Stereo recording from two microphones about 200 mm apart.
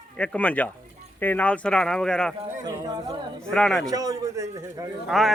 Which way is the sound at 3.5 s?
Centre (ahead or behind).